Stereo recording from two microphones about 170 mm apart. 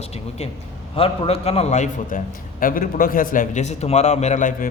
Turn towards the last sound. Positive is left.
turn(degrees=50)  # may be behind; listen again after turning